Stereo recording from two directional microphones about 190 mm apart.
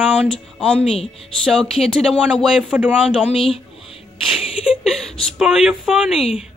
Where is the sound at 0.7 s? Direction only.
30° left (ahead or behind).